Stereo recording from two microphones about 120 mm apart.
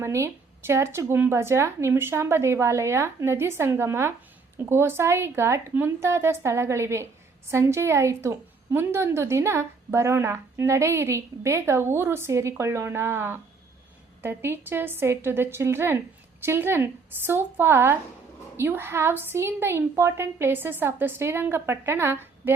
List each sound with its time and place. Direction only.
0.0 s a woman's voice: 25° right (ahead or behind)